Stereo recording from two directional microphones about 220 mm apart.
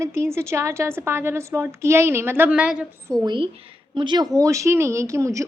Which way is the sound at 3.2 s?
20° right (ahead or behind).